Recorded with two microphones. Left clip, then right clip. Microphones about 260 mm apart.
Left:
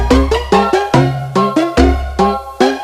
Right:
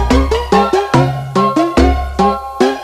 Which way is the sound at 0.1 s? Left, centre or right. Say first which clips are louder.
Left 2 dB; centre.